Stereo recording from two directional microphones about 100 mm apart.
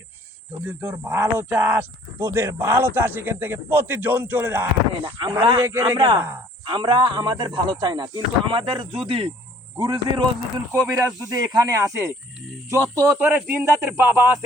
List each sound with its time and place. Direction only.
0.6 s a man's voice: 15° right (ahead or behind)
4.9 s speech: 60° right (ahead or behind)
5.5 s a man's voice: 25° right (ahead or behind)
6.0 s speech: 55° right (ahead or behind)
9.7 s speech: 50° right (ahead or behind)
10.8 s a man's voice: 35° right (ahead or behind)